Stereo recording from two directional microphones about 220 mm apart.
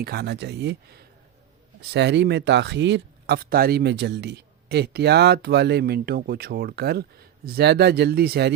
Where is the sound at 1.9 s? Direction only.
50° right (ahead or behind).